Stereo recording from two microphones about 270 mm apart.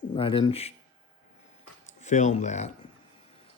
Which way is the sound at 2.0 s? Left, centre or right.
Left.